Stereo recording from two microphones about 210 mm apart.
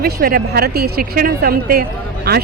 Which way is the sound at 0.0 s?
45° right (ahead or behind).